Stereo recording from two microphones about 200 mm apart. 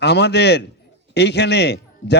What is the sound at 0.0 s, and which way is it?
A man's voice, 60° left (ahead or behind).